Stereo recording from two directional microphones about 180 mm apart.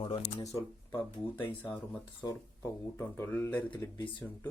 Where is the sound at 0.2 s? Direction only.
20° left (ahead or behind).